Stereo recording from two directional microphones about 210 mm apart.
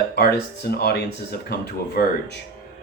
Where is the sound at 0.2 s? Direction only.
50° left (ahead or behind).